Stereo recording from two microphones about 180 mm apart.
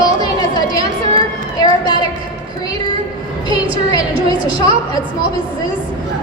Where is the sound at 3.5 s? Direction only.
25° left (ahead or behind).